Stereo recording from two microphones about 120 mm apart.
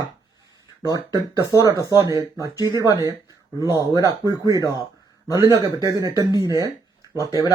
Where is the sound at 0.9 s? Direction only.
30° right (ahead or behind).